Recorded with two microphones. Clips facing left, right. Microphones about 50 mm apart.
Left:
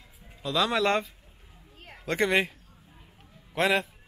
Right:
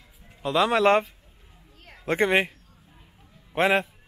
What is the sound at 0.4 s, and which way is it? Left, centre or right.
Speech, right.